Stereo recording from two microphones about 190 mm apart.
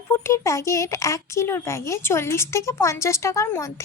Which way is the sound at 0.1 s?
15° left (ahead or behind).